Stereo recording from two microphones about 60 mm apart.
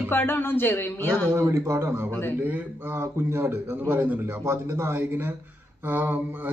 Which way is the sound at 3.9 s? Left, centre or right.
Right.